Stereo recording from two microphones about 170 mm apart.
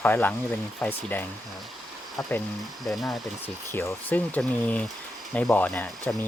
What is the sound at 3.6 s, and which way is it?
Speech, 15° left (ahead or behind).